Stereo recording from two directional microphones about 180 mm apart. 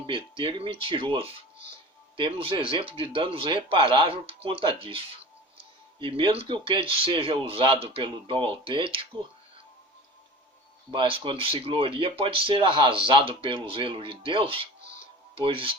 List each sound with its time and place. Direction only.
0.0 s speech: 30° right (ahead or behind)
10.9 s speech: 30° right (ahead or behind)